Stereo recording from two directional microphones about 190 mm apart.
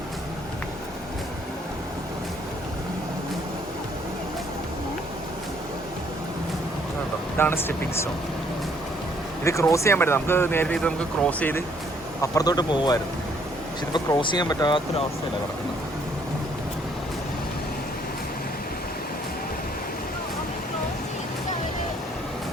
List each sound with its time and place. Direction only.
7.3 s speech: 10° left (ahead or behind)
9.4 s speech: 15° left (ahead or behind)